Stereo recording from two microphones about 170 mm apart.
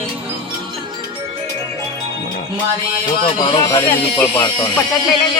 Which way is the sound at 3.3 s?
25° left (ahead or behind).